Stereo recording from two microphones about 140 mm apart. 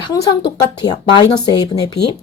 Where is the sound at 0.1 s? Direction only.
30° left (ahead or behind).